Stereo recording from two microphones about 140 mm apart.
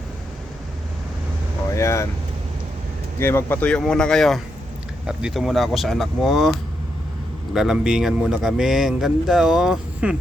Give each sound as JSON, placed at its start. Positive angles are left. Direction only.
{"t": 1.7, "sound": "speech", "side_deg": 20}
{"t": 3.2, "sound": "speech", "side_deg": 15}
{"t": 7.5, "sound": "speech", "side_deg": -5}